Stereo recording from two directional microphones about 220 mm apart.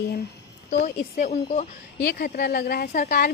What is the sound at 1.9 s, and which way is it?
A woman's voice, 45° left (ahead or behind).